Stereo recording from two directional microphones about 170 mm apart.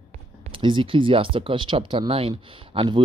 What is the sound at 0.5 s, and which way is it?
Speech, 30° right (ahead or behind).